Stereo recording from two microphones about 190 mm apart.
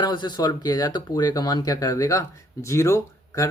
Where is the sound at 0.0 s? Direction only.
20° left (ahead or behind).